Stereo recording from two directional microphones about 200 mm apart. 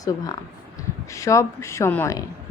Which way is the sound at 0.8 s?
15° left (ahead or behind).